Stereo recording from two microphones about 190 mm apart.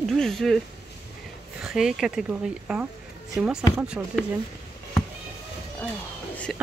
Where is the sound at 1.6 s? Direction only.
5° right (ahead or behind).